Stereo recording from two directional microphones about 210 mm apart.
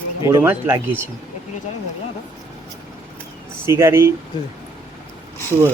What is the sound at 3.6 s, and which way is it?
Speech, 15° right (ahead or behind).